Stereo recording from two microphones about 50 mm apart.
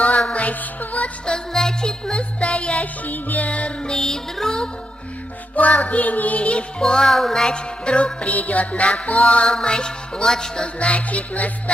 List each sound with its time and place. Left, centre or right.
0.3 s music: left
1.3 s music: centre
3.9 s music: centre
5.5 s music: left; by 7.4 s centre
7.4 s music: centre
10.8 s music: left